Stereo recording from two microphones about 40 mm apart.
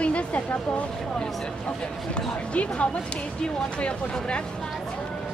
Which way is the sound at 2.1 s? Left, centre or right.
Left.